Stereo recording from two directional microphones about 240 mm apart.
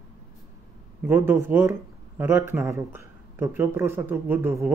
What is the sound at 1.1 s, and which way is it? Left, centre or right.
Speech, centre.